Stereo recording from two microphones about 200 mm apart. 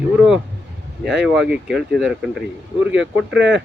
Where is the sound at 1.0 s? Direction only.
5° right (ahead or behind).